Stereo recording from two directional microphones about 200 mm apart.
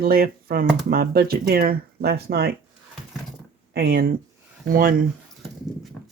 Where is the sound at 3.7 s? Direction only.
50° right (ahead or behind).